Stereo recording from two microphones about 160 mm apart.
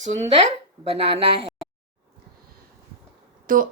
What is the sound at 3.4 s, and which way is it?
Speech, 60° right (ahead or behind).